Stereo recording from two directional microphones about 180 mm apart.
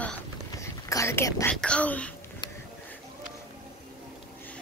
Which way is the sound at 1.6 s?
5° left (ahead or behind).